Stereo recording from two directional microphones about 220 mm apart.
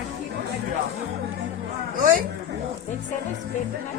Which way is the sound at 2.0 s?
40° right (ahead or behind).